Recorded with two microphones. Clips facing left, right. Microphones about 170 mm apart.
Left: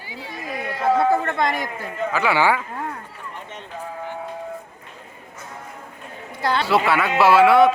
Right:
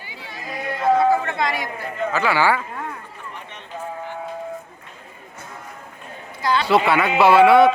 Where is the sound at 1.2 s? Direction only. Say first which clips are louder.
Left 1 dB; 50° left (ahead or behind).